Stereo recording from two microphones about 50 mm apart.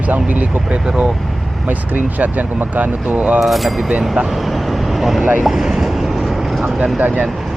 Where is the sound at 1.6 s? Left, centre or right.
Right.